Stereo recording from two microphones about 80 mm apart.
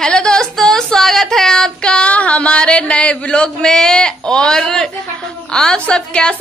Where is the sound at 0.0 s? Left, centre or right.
Centre.